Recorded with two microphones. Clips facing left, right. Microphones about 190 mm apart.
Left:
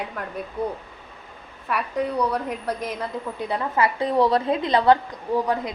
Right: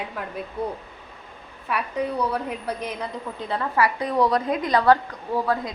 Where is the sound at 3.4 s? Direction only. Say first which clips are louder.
Even; 15° left (ahead or behind).